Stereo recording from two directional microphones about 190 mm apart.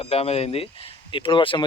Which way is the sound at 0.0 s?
30° left (ahead or behind).